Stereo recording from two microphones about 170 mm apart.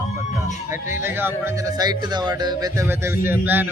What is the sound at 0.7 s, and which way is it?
A man's voice, 15° right (ahead or behind).